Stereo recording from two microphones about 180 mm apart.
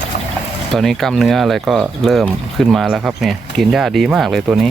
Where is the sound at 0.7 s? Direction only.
Centre (ahead or behind).